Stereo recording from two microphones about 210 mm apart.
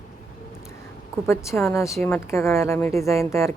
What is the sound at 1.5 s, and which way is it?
A woman's voice, 15° left (ahead or behind).